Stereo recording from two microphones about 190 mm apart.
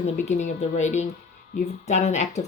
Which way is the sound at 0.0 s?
35° left (ahead or behind).